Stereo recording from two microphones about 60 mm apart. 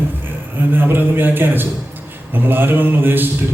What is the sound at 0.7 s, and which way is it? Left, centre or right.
A man's voice, right.